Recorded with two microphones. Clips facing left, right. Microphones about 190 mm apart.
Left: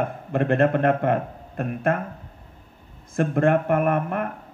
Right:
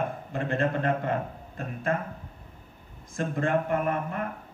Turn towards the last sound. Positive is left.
turn(degrees=60)  # may be behind; listen again after turning